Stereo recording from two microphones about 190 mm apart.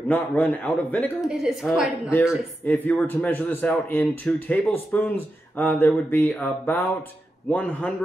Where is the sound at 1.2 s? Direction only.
5° right (ahead or behind).